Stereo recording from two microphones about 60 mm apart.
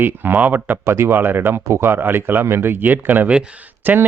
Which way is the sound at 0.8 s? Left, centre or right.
Right.